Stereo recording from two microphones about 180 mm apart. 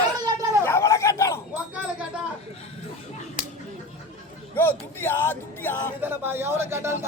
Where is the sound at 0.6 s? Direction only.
15° left (ahead or behind).